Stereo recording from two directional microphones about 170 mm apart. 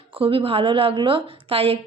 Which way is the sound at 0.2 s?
35° right (ahead or behind).